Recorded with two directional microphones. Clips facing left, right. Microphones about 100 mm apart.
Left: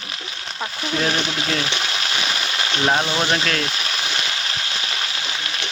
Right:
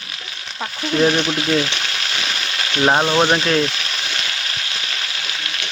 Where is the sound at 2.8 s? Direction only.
30° right (ahead or behind).